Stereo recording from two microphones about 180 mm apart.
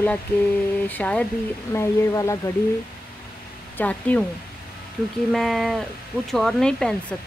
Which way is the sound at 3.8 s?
10° left (ahead or behind).